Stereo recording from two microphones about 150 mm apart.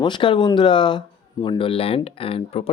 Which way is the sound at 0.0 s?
30° left (ahead or behind).